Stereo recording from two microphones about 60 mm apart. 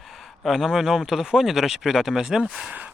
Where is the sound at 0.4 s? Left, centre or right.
Centre.